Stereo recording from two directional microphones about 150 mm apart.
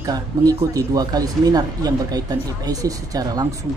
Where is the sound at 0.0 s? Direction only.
25° right (ahead or behind).